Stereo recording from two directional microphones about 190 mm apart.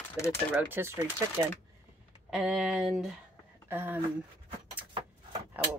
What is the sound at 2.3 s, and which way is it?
Speech, centre (ahead or behind).